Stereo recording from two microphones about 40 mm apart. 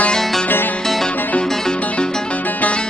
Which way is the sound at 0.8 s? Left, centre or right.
Centre.